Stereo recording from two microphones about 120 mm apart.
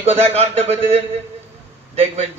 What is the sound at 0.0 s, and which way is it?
A man's voice, 60° right (ahead or behind).